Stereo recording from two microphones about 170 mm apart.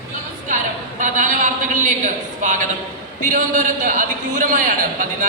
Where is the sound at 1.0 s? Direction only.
50° right (ahead or behind).